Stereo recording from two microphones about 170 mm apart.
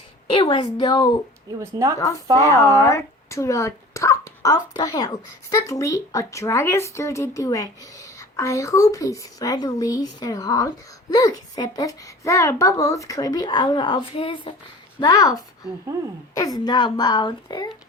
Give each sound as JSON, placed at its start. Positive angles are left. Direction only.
{"t": 0.3, "sound": "speech", "side_deg": 30}
{"t": 1.5, "sound": "a woman's voice", "side_deg": -20}
{"t": 2.0, "sound": "speech", "side_deg": 20}